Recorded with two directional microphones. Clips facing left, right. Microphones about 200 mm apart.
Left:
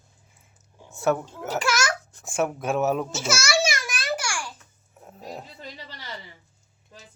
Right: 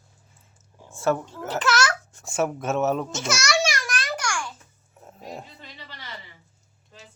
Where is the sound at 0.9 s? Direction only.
Centre (ahead or behind).